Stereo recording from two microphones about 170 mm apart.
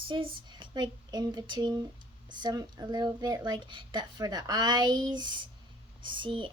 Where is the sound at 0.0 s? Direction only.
30° right (ahead or behind).